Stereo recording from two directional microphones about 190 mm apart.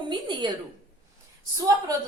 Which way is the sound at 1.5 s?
15° right (ahead or behind).